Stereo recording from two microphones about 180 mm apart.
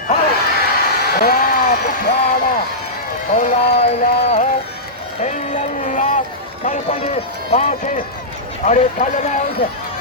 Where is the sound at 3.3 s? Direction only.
40° left (ahead or behind).